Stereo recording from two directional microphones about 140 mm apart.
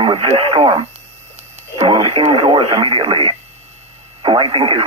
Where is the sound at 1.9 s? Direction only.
40° right (ahead or behind).